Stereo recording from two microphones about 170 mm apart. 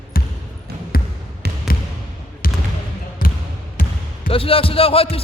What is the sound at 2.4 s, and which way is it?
Basketball bounce, 55° left (ahead or behind).